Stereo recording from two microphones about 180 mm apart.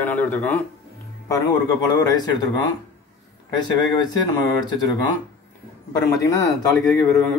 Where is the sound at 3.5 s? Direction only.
25° left (ahead or behind).